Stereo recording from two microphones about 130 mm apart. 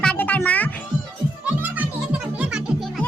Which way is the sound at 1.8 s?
10° right (ahead or behind).